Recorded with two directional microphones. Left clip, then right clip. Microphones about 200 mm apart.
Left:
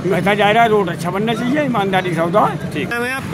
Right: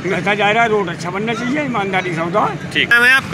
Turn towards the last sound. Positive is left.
turn(degrees=10)  # may be behind; listen again after turning